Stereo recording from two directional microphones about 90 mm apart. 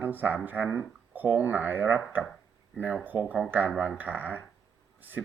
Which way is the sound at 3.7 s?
10° right (ahead or behind).